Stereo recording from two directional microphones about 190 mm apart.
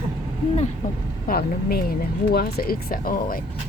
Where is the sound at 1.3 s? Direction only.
55° left (ahead or behind).